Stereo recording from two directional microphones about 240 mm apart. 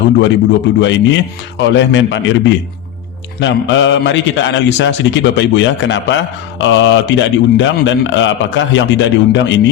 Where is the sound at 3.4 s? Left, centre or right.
Left.